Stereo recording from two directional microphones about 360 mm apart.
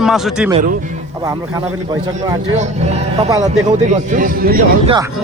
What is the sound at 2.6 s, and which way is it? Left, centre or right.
Speech, centre.